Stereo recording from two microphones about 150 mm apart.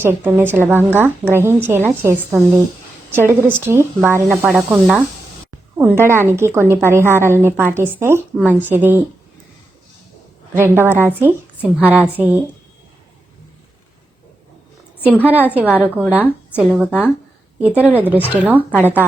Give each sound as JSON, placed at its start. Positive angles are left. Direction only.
{"t": 0.0, "sound": "speech", "side_deg": -15}
{"t": 10.6, "sound": "speech", "side_deg": -15}
{"t": 15.0, "sound": "a woman's voice", "side_deg": 10}
{"t": 15.5, "sound": "speech", "side_deg": -10}